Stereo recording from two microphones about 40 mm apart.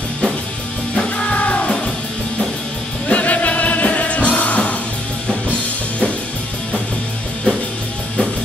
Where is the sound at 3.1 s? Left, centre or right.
Left.